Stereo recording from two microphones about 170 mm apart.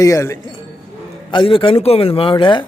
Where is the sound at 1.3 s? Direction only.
30° left (ahead or behind).